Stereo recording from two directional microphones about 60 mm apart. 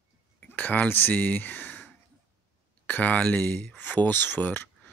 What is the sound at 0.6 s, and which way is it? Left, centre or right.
Speech, left.